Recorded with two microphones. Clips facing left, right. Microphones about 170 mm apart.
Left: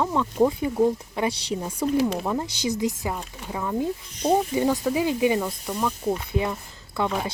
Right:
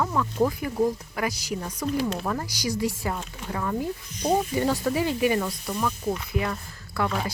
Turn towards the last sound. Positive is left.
turn(degrees=20)  # may be behind; listen again after turning